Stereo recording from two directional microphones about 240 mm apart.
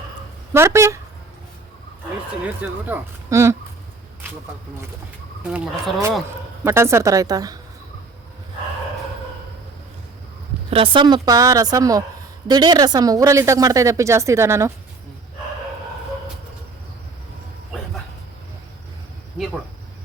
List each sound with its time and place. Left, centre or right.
0.5 s a woman's voice: centre
2.6 s a woman's voice: centre
5.4 s a woman's voice: centre
10.7 s a woman's voice: right